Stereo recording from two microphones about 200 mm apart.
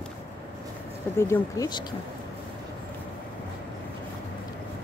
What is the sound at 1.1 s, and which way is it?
Speech, 15° left (ahead or behind).